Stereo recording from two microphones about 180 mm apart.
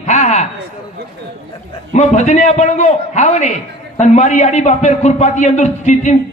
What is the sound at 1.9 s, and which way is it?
A man's voice, 40° left (ahead or behind).